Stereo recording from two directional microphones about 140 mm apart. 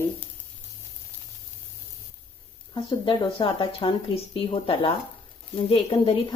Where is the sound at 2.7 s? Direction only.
35° left (ahead or behind).